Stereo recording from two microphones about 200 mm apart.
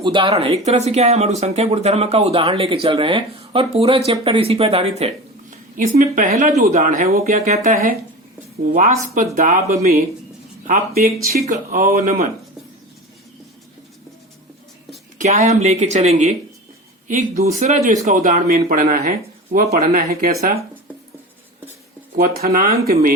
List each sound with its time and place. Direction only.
0.0 s speech: 25° right (ahead or behind); by 12.3 s 45° right (ahead or behind)
15.2 s speech: 35° right (ahead or behind)
22.1 s speech: 45° right (ahead or behind)